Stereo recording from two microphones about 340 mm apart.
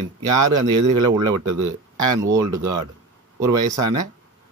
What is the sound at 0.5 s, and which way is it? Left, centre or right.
Speech, right.